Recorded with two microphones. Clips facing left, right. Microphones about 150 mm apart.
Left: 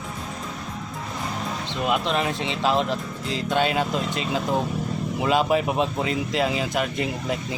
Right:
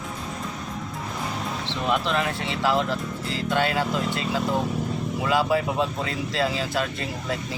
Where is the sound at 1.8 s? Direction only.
20° left (ahead or behind).